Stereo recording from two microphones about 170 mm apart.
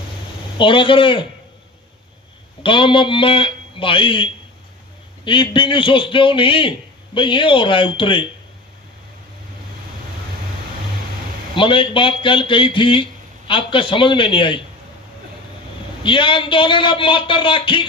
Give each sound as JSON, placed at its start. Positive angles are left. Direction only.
{"t": 0.6, "sound": "a man's voice", "side_deg": 30}
{"t": 2.6, "sound": "a man's voice", "side_deg": 30}
{"t": 11.5, "sound": "a man's voice", "side_deg": 30}
{"t": 16.0, "sound": "a man's voice", "side_deg": 30}